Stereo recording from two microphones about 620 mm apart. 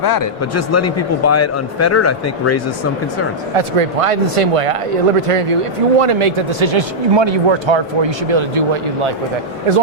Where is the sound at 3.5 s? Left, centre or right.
Right.